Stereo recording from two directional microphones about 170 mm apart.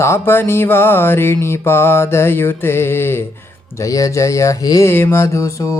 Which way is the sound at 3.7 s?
20° left (ahead or behind).